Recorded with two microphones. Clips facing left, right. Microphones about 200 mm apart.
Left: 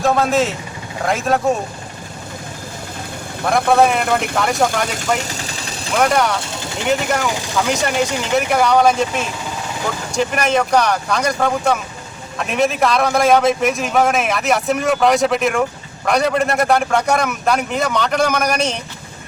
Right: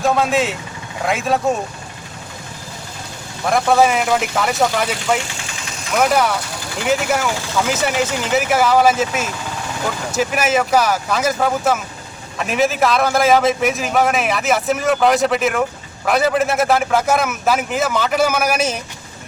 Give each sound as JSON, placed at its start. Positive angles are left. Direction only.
{"t": 0.0, "sound": "a man's voice", "side_deg": 0}
{"t": 3.4, "sound": "a man's voice", "side_deg": 0}
{"t": 5.1, "sound": "vehicle", "side_deg": 40}
{"t": 5.9, "sound": "a man's voice", "side_deg": 0}